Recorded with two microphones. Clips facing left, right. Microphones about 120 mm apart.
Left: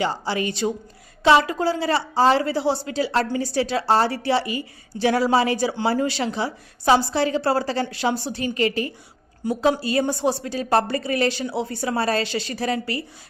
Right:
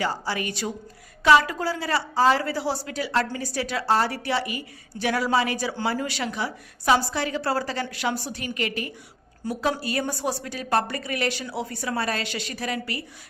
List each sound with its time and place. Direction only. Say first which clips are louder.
0.0 s a woman's voice: left 4 dB; 25° left (ahead or behind)